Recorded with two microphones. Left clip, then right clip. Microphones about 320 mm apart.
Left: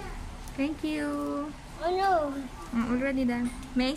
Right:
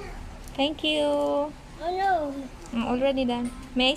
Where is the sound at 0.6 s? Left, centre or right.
Right.